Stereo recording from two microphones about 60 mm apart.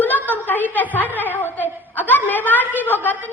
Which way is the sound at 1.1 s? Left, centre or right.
Left.